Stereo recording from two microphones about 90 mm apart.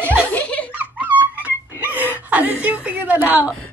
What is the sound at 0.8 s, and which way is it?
Dog, 20° right (ahead or behind).